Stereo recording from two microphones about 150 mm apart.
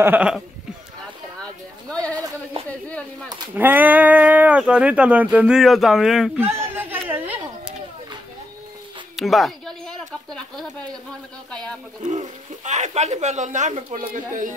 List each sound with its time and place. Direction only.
0.0 s speech: 10° right (ahead or behind)
2.9 s a sound: 10° left (ahead or behind)
3.5 s speech: 10° right (ahead or behind)
6.6 s a sound: 15° right (ahead or behind)
9.1 s speech: centre (ahead or behind)
12.0 s speech: 55° right (ahead or behind)